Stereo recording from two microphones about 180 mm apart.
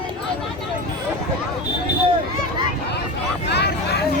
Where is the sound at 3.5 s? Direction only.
70° left (ahead or behind).